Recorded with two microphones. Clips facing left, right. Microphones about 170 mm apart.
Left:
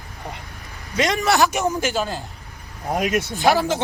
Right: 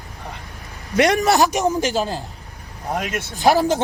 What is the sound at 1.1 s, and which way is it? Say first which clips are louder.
Speech: right 2 dB; 40° right (ahead or behind).